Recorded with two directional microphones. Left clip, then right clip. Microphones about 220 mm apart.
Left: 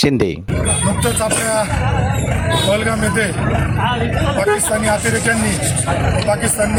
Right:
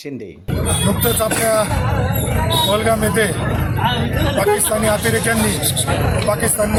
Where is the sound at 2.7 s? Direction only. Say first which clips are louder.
Even; centre (ahead or behind).